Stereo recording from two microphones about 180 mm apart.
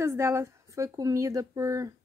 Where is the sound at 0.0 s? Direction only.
15° right (ahead or behind).